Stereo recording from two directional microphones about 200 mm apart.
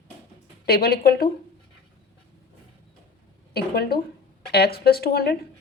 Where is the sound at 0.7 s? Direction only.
50° left (ahead or behind).